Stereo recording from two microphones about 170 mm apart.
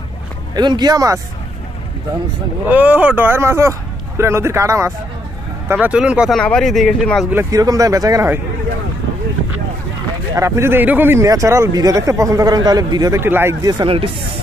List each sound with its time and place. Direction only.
0.6 s speech: 25° right (ahead or behind)
2.7 s speech: 10° right (ahead or behind)
7.2 s speech: 15° right (ahead or behind)
10.3 s speech: 15° right (ahead or behind); by 14.1 s 30° right (ahead or behind)